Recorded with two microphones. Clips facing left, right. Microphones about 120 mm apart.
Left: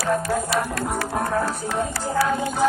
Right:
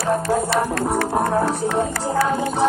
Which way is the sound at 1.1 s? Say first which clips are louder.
Right 2 dB; 20° right (ahead or behind).